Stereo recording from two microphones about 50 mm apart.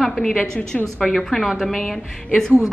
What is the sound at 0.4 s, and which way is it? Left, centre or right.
Speech, left.